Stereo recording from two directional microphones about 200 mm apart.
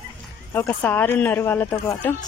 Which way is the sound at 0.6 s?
10° left (ahead or behind).